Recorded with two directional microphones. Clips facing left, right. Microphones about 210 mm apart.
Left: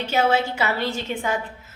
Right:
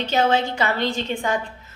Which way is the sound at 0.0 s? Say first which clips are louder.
Right 1 dB; 10° left (ahead or behind).